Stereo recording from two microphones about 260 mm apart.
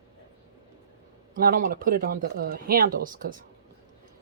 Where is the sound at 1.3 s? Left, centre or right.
Right.